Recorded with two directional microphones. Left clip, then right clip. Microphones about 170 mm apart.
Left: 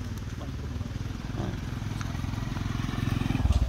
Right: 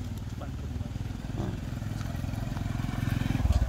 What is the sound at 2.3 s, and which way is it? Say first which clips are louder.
Vehicle: left 2 dB; 30° right (ahead or behind).